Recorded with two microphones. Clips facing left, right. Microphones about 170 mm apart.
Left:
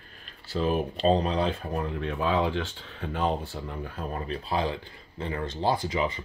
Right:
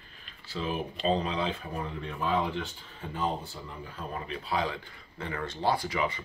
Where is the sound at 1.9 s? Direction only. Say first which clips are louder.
Left 3 dB; 80° left.